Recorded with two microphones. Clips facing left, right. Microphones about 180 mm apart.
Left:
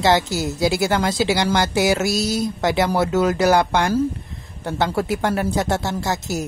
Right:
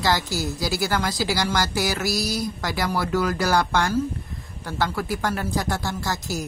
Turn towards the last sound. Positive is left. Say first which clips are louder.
# left 4 dB
turn(degrees=25)  # may be behind; listen again after turning